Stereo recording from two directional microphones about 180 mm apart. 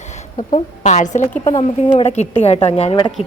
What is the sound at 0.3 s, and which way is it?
A woman's voice, 40° left (ahead or behind).